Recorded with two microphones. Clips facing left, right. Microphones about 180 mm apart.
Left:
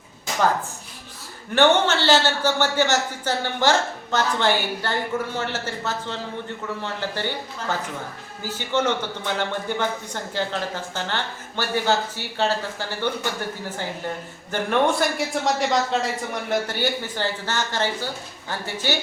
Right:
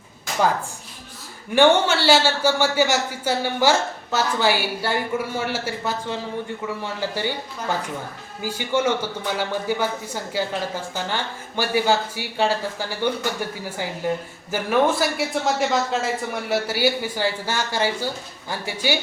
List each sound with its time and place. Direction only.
1.5 s a man's voice: 10° right (ahead or behind)